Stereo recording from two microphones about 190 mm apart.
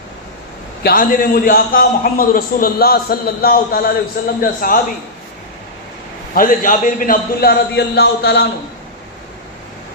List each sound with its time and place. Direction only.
0.8 s a man's voice: 50° left (ahead or behind)
6.3 s a man's voice: 45° left (ahead or behind)